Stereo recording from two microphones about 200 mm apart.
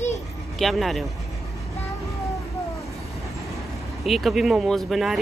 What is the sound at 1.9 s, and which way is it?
Vehicle, 15° left (ahead or behind).